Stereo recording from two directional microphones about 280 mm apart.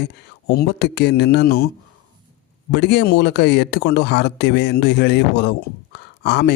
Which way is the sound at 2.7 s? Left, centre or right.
Left.